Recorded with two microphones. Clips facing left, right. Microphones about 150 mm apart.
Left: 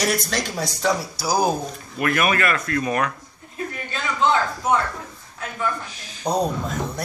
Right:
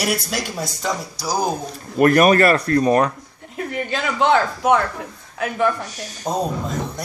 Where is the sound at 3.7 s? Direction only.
75° right (ahead or behind).